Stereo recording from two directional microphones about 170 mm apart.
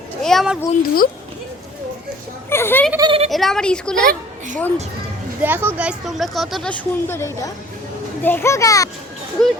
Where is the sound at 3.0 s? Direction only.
25° right (ahead or behind).